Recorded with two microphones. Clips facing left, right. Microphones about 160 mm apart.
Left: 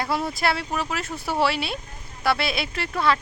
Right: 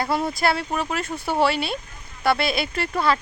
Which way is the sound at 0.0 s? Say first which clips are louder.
Right 2 dB; centre (ahead or behind).